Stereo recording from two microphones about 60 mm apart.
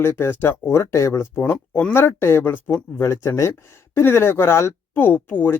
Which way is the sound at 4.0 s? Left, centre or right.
Left.